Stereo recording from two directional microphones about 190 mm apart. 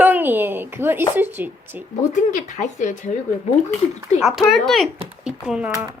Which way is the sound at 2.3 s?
40° left (ahead or behind).